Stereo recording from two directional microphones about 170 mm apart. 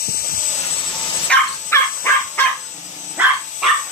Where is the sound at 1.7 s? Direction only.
10° left (ahead or behind).